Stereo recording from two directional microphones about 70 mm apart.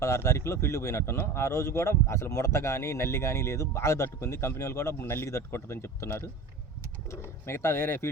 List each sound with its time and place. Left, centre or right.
0.0 s a man's voice: left
4.9 s a man's voice: left